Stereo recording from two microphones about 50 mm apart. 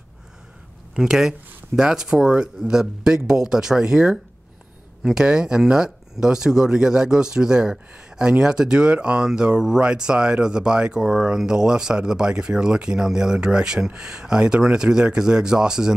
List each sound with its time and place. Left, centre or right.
0.9 s speech: centre